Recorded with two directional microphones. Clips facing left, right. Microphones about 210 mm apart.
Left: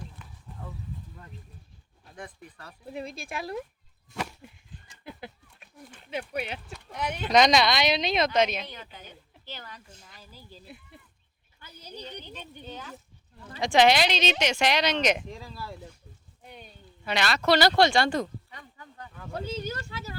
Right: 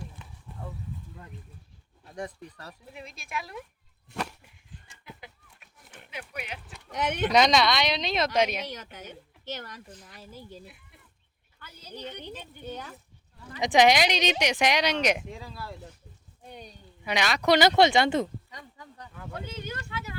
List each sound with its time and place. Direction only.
2.1 s speech: 40° right (ahead or behind)
2.9 s speech: 35° left (ahead or behind)
6.1 s speech: 30° left (ahead or behind)
6.9 s speech: 80° right
7.3 s speech: centre (ahead or behind)
8.9 s a woman's voice: 75° right (ahead or behind)
11.8 s a woman's voice: 10° left (ahead or behind)
13.5 s speech: 15° right (ahead or behind); by 15.7 s centre (ahead or behind)
17.0 s speech: 15° right (ahead or behind)
19.3 s speech: 30° left (ahead or behind)